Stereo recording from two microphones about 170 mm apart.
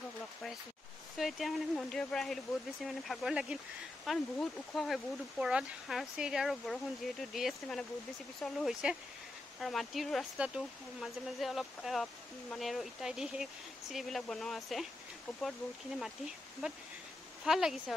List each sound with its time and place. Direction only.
1.1 s speech: centre (ahead or behind)
16.6 s speech: 5° right (ahead or behind)